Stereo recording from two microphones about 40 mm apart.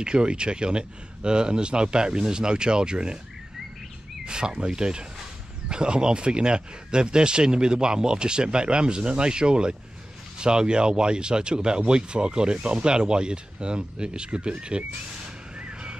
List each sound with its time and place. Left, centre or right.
0.0 s speech: right
4.3 s speech: right
15.5 s a sound: right